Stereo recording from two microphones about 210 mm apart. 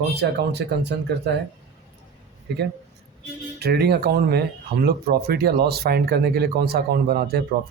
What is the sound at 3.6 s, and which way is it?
Speech, 50° right (ahead or behind).